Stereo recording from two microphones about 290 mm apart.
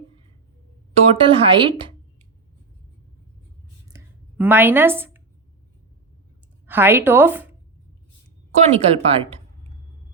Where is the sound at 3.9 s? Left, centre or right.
Centre.